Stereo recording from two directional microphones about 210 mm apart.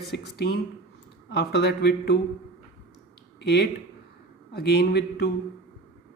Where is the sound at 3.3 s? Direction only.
50° left (ahead or behind).